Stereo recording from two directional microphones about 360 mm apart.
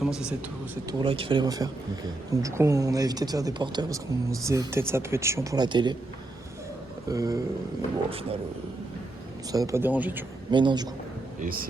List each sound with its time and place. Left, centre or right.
0.0 s speech: centre
0.9 s speech: centre
7.1 s speech: centre
9.5 s speech: centre
11.3 s speech: right